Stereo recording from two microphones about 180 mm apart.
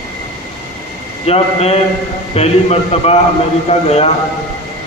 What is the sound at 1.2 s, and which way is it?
A man's voice, 35° left (ahead or behind).